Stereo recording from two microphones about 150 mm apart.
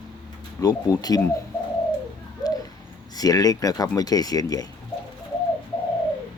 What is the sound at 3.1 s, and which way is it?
Speech, 25° left (ahead or behind).